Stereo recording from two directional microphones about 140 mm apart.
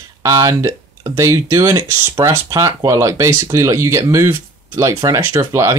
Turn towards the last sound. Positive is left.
turn(degrees=-20)  # may be behind; listen again after turning